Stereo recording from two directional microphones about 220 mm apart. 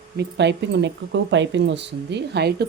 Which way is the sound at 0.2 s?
50° right (ahead or behind).